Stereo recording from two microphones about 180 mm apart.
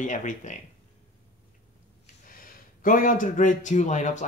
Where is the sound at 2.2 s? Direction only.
50° left (ahead or behind).